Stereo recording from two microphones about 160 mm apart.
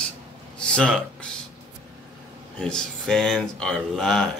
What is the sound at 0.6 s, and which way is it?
Speech, 5° left (ahead or behind).